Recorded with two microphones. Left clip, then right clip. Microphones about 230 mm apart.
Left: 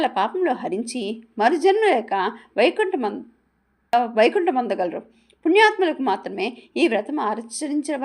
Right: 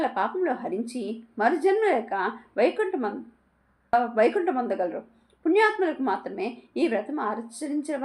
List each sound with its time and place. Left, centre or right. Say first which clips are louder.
0.0 s a woman's voice: left 5 dB; left
3.9 s a woman's voice: left 4 dB; left